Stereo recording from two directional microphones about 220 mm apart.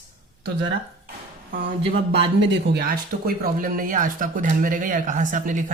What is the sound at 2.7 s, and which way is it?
Speech, 45° right (ahead or behind).